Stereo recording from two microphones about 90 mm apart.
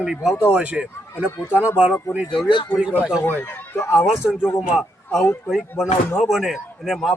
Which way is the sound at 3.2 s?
25° left (ahead or behind).